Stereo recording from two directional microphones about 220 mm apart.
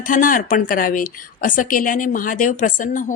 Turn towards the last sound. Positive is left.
turn(degrees=35)  # may be behind; listen again after turning